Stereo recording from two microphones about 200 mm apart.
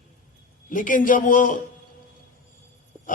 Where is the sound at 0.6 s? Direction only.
40° left (ahead or behind).